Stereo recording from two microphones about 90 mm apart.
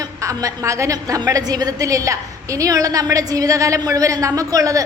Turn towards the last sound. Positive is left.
turn(degrees=-40)  # may be behind; listen again after turning